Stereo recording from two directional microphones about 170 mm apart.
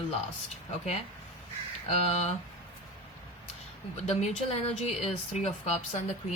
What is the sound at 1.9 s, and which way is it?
Speech, 40° left (ahead or behind).